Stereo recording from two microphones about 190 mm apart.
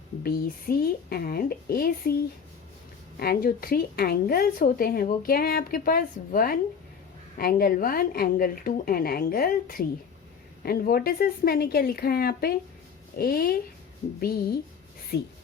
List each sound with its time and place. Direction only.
0.2 s a woman's voice: 50° left (ahead or behind)
3.2 s a woman's voice: 50° left (ahead or behind)
15.1 s speech: 55° left (ahead or behind)